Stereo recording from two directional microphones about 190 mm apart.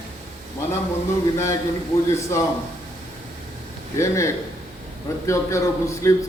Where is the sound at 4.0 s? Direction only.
15° left (ahead or behind).